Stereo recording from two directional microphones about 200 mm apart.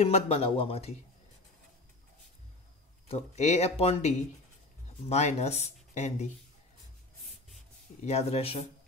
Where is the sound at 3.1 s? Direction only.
35° left (ahead or behind).